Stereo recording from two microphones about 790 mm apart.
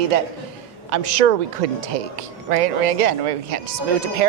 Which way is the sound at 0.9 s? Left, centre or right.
Right.